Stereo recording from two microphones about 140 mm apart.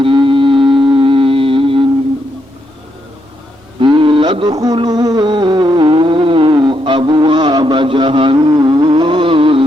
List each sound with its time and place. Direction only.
0.0 s music: 35° right (ahead or behind)
3.8 s music: 35° right (ahead or behind)